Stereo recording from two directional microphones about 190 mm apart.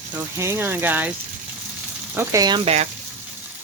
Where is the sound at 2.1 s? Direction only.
15° right (ahead or behind); by 2.9 s 35° right (ahead or behind).